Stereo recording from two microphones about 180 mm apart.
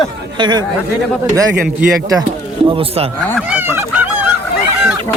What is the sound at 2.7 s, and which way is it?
Speech, 30° right (ahead or behind).